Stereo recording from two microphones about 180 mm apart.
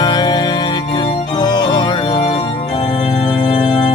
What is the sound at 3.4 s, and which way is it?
Organ, 25° left (ahead or behind).